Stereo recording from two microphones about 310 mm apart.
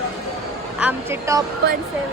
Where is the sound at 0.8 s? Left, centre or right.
Centre.